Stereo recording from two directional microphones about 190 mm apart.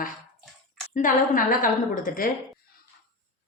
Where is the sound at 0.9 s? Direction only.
45° left (ahead or behind).